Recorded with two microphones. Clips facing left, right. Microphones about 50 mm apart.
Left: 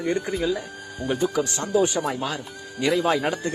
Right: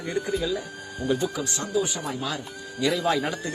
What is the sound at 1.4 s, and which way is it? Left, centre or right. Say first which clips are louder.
Speech: left 6 dB; left.